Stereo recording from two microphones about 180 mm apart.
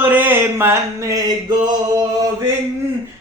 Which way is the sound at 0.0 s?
10° right (ahead or behind).